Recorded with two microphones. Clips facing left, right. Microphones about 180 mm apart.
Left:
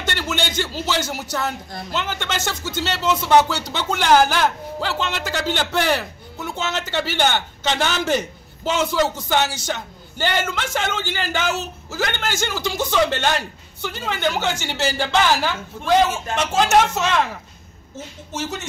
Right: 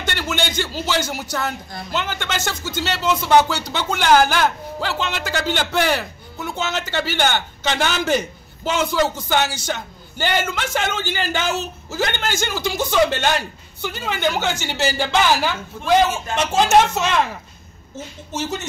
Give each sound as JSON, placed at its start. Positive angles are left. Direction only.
{"t": 0.0, "sound": "a man's voice", "side_deg": 0}
{"t": 18.3, "sound": "speech", "side_deg": -25}